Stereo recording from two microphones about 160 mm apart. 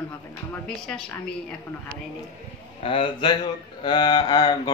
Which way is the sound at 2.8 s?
35° left (ahead or behind).